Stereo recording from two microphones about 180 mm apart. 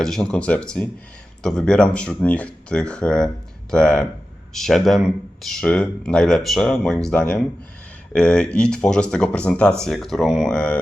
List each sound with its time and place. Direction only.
0.0 s speech: 5° left (ahead or behind)